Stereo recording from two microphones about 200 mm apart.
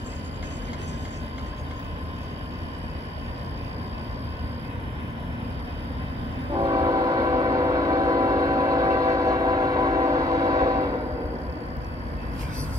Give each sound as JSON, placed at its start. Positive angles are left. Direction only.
{"t": 6.5, "sound": "train", "side_deg": -20}